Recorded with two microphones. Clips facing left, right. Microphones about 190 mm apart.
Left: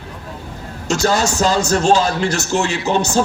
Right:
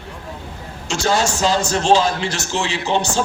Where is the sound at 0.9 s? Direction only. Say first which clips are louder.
Left 2 dB; 40° left (ahead or behind).